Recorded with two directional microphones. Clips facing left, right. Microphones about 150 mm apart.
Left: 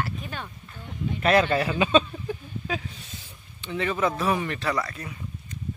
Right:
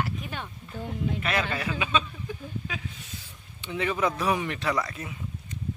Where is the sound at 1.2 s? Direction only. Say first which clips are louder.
Left 13 dB; 35° left (ahead or behind).